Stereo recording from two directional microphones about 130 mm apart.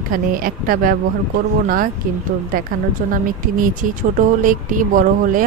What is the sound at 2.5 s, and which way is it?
Speech, 90° right.